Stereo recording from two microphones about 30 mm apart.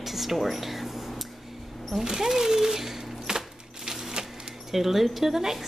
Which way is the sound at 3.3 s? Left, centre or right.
Right.